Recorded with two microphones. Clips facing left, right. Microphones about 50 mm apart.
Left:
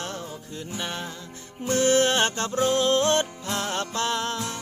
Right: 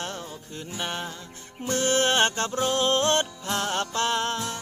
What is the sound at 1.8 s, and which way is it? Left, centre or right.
Music, right.